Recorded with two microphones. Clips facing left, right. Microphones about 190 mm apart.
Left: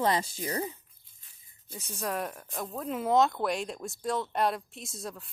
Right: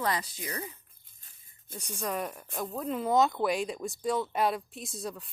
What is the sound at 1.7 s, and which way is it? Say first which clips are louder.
Speech: even; 5° left (ahead or behind).